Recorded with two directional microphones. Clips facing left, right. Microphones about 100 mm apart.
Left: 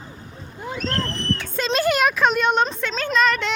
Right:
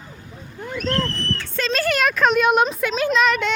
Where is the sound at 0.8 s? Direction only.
30° left (ahead or behind).